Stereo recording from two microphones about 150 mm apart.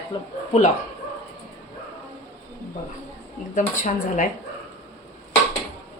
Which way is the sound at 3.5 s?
60° left (ahead or behind).